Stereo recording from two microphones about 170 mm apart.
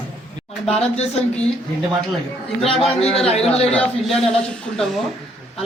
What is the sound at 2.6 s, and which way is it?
Speech, 35° left (ahead or behind).